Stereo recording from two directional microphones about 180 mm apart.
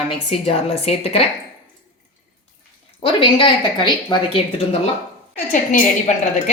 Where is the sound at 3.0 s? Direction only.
25° left (ahead or behind).